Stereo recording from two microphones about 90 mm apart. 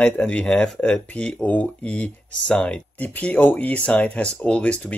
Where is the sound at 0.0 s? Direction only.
15° left (ahead or behind).